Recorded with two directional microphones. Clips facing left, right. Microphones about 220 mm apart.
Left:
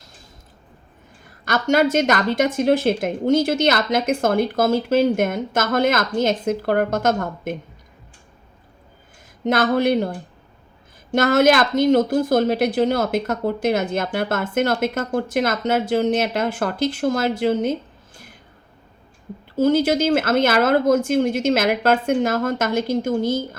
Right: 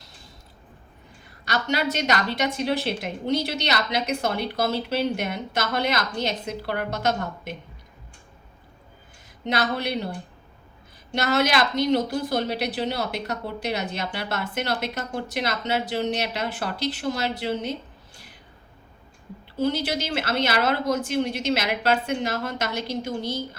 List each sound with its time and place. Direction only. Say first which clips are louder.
1.5 s a woman's voice: left 8 dB; 45° left (ahead or behind)
9.4 s a woman's voice: left 8 dB; 50° left (ahead or behind)
19.5 s a woman's voice: left 8 dB; 45° left (ahead or behind)